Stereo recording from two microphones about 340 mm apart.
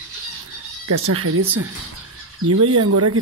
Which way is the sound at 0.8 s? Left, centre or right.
Right.